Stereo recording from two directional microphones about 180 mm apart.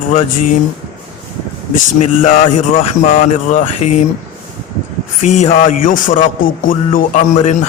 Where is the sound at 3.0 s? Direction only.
45° left (ahead or behind).